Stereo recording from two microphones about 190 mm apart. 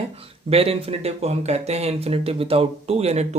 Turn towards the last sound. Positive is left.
turn(degrees=-35)  # may be behind; listen again after turning